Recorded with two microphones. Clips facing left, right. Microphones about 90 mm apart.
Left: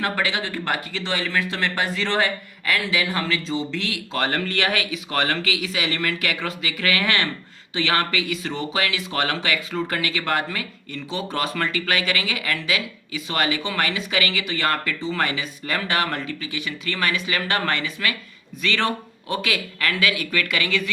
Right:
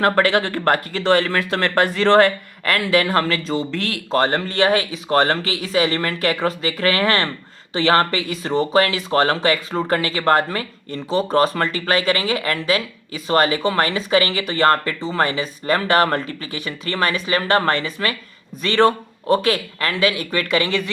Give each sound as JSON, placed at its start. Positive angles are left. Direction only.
{"t": 0.0, "sound": "speech", "side_deg": -50}
{"t": 4.2, "sound": "speech", "side_deg": -30}